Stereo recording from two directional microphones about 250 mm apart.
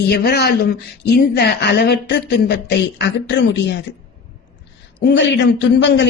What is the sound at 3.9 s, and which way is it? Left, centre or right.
Speech, left.